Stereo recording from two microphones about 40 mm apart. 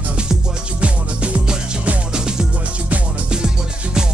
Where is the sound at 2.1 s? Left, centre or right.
Right.